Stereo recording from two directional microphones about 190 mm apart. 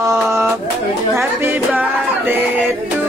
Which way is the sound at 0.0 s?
15° right (ahead or behind).